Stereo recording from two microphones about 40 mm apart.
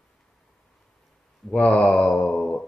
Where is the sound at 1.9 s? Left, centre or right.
Left.